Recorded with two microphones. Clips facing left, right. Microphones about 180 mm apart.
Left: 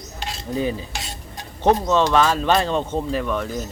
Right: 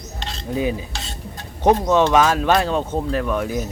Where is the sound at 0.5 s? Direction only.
10° right (ahead or behind).